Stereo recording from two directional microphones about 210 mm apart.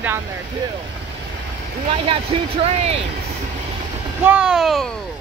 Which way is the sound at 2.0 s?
25° right (ahead or behind).